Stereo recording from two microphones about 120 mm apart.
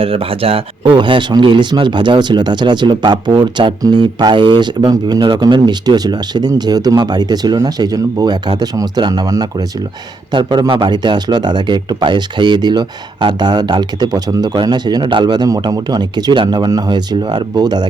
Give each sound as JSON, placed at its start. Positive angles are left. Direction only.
{"t": 0.0, "sound": "speech", "side_deg": -50}